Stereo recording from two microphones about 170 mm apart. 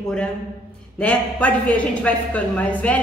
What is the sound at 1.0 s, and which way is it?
A woman's voice, 5° left (ahead or behind).